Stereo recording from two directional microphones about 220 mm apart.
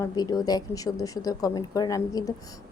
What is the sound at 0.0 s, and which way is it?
A woman's voice, 15° left (ahead or behind).